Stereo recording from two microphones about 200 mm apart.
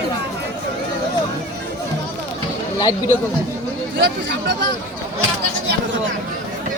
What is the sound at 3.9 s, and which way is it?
Speech, 60° right (ahead or behind).